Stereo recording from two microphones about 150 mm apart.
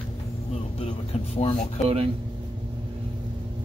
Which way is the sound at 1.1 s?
45° left (ahead or behind).